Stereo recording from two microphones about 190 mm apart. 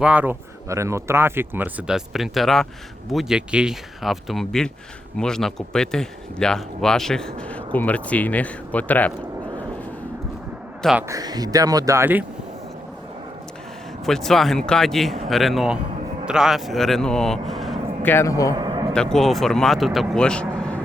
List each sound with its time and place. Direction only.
0.0 s speech: 5° right (ahead or behind); by 9.1 s 10° left (ahead or behind)
11.1 s speech: 20° right (ahead or behind)
14.0 s speech: centre (ahead or behind)
18.1 s a man's voice: 15° left (ahead or behind)
18.5 s a sound: 20° right (ahead or behind)
18.9 s speech: centre (ahead or behind)